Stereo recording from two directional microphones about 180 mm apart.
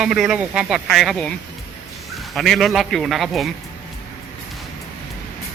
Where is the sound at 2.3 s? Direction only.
Centre (ahead or behind).